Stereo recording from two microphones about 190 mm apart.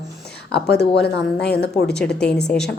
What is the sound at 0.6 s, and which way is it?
Speech, 60° left (ahead or behind).